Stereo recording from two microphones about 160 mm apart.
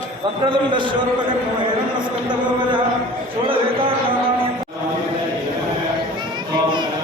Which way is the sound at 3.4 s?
35° right (ahead or behind).